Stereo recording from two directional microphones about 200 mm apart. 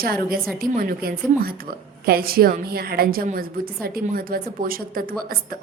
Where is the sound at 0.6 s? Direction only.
45° right (ahead or behind).